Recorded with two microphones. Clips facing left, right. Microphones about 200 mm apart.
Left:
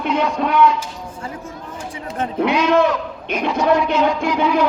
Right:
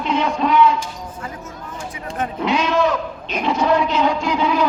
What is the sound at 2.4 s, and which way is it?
Speech, 55° left (ahead or behind).